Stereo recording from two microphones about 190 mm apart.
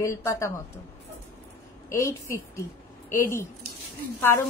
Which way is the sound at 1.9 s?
15° left (ahead or behind).